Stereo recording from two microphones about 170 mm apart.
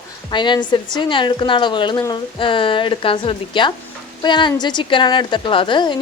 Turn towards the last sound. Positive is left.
turn(degrees=30)  # may be behind; listen again after turning